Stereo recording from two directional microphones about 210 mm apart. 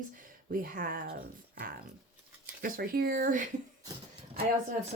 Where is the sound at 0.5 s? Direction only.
40° right (ahead or behind).